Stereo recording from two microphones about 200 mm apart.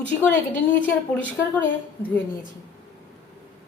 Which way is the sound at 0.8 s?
10° left (ahead or behind).